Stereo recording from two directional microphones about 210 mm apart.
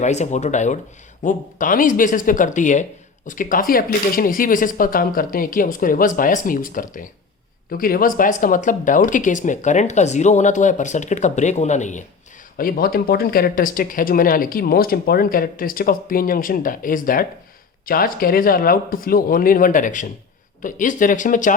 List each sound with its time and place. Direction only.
0.0 s speech: 35° left (ahead or behind)